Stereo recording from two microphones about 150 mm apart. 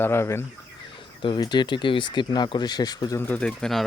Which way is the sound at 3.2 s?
10° left (ahead or behind).